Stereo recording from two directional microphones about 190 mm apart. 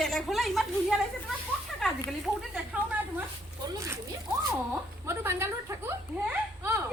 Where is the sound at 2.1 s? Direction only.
5° right (ahead or behind).